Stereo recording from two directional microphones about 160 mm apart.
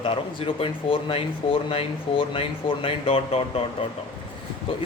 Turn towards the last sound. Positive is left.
turn(degrees=35)  # may be behind; listen again after turning